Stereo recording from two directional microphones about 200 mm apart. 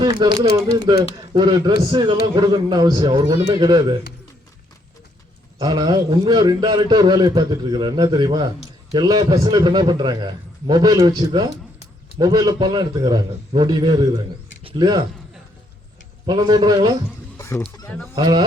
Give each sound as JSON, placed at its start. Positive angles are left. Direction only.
{"t": 0.0, "sound": "a man's voice", "side_deg": -20}
{"t": 5.5, "sound": "a man's voice", "side_deg": -20}
{"t": 16.2, "sound": "a man's voice", "side_deg": -20}
{"t": 17.3, "sound": "fowl", "side_deg": 15}
{"t": 18.1, "sound": "a man's voice", "side_deg": -20}